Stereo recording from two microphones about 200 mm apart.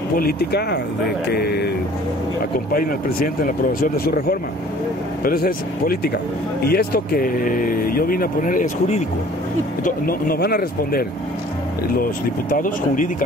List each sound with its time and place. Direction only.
0.1 s speech: 50° left (ahead or behind)
2.7 s speech: 45° left (ahead or behind)